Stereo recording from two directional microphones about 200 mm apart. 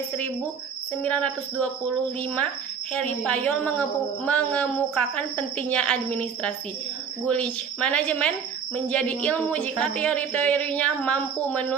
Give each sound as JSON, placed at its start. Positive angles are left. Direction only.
{"t": 1.0, "sound": "speech", "side_deg": 5}
{"t": 2.9, "sound": "speech", "side_deg": 5}